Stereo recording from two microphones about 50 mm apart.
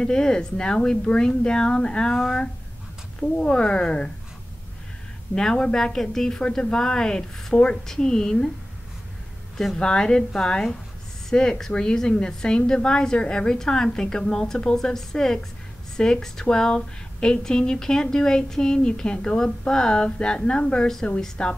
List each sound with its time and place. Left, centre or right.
0.0 s speech: centre
5.3 s speech: centre
9.8 s speech: centre